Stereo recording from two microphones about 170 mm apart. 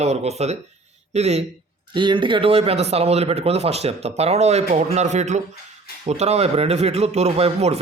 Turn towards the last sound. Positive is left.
turn(degrees=-40)  # may be behind; listen again after turning